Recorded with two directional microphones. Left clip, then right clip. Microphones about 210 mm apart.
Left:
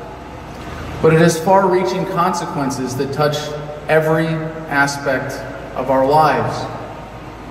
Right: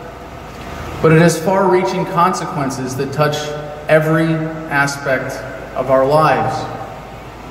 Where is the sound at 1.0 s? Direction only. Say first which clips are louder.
Right 1 dB; 25° right (ahead or behind).